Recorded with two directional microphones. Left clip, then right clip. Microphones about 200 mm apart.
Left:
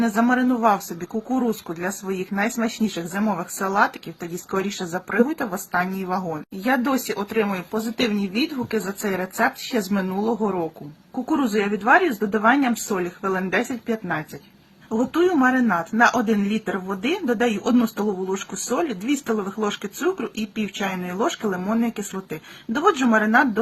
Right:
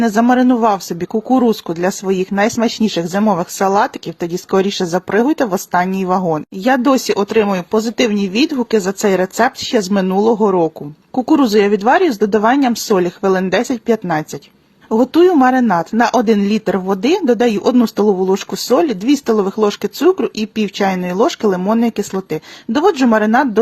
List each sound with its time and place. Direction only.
0.0 s speech: 40° right (ahead or behind)
11.5 s speech: 50° right (ahead or behind)
17.9 s speech: 40° right (ahead or behind)